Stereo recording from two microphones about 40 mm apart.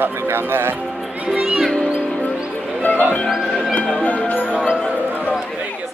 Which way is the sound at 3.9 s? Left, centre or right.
Left.